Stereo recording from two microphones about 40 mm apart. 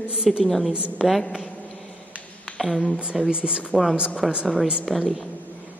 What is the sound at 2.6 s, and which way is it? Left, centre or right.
Speech, centre.